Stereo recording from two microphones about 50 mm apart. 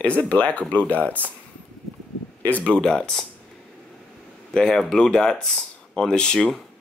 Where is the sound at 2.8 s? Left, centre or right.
Centre.